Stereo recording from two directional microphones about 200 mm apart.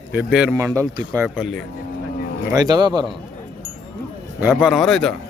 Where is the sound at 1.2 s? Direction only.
5° right (ahead or behind).